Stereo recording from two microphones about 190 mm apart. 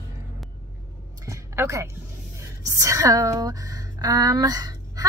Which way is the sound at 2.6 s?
15° right (ahead or behind).